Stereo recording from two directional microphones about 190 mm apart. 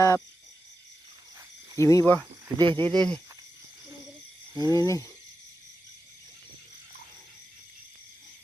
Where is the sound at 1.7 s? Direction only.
15° left (ahead or behind).